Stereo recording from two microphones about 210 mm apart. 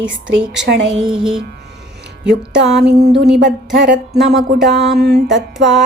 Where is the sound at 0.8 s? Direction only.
5° right (ahead or behind).